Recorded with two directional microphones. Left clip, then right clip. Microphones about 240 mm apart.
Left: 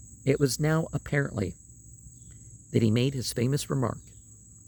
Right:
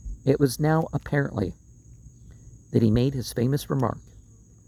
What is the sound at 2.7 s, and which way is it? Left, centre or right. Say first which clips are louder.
Speech: right 3 dB; centre.